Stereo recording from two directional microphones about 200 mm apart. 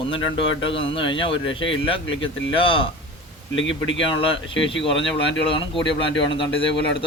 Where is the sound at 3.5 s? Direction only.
70° left (ahead or behind).